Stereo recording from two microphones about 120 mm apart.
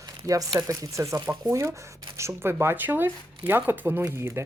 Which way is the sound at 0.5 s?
35° right (ahead or behind).